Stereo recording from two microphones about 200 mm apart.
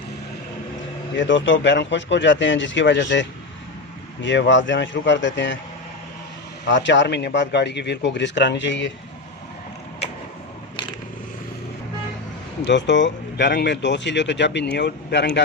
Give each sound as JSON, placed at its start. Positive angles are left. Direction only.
{"t": 1.1, "sound": "speech", "side_deg": 65}
{"t": 6.7, "sound": "speech", "side_deg": 65}
{"t": 12.6, "sound": "speech", "side_deg": 60}